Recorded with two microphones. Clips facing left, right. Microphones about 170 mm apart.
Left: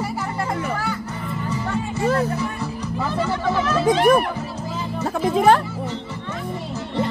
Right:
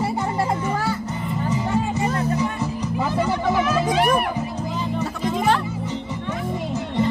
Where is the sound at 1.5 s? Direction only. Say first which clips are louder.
Right 3 dB; 20° right (ahead or behind).